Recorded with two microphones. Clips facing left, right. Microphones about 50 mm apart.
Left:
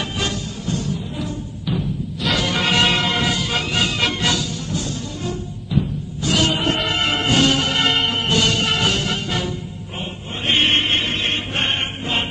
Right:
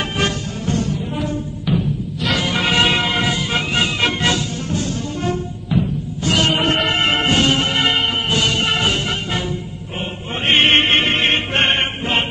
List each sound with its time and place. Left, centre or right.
0.2 s music: right
1.7 s music: centre; by 7.8 s right
7.8 s music: centre
8.5 s music: centre
10.4 s music: right